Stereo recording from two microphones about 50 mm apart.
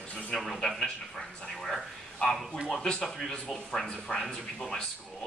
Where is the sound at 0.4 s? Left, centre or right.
Centre.